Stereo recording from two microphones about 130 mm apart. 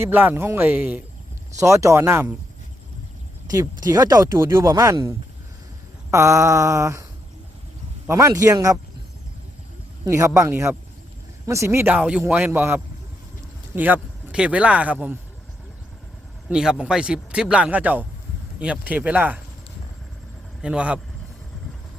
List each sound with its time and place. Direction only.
0.0 s speech: 15° right (ahead or behind)
1.5 s speech: 25° right (ahead or behind)
3.5 s speech: 30° right (ahead or behind)
8.0 s speech: 25° right (ahead or behind)
10.1 s speech: 20° right (ahead or behind)
11.9 s speech: 10° right (ahead or behind)
16.5 s speech: 5° right (ahead or behind)
20.6 s speech: 10° right (ahead or behind)